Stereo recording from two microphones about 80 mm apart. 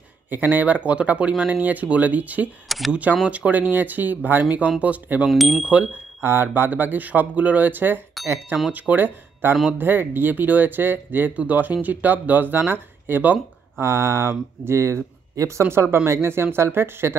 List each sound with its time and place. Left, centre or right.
0.3 s speech: right
5.3 s speech: centre
5.6 s speech: centre
6.2 s speech: right